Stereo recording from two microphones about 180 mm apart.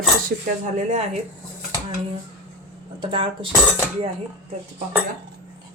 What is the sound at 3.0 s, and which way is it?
Speech, 30° right (ahead or behind).